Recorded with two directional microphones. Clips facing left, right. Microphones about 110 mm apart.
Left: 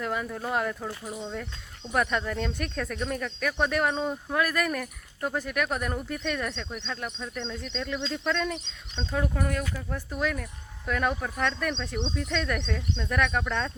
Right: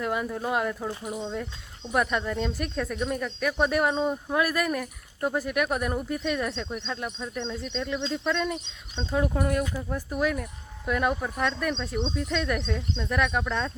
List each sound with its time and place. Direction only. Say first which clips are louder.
0.0 s speech: right 2 dB; 10° right (ahead or behind)
1.9 s speech: right 1 dB; 5° right (ahead or behind)
9.1 s speech: right 4 dB; 20° right (ahead or behind); by 13.7 s 5° right (ahead or behind)